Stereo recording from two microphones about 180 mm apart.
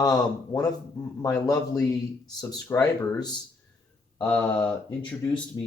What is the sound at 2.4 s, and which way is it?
Speech, 20° left (ahead or behind).